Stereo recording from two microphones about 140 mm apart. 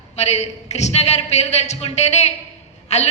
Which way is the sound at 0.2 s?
50° left (ahead or behind).